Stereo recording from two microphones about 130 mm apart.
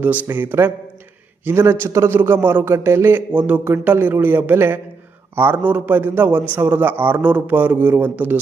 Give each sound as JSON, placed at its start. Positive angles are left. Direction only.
{"t": 0.0, "sound": "a man's voice", "side_deg": -10}